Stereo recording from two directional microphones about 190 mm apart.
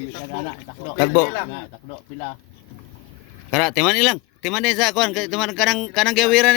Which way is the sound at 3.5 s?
Centre (ahead or behind).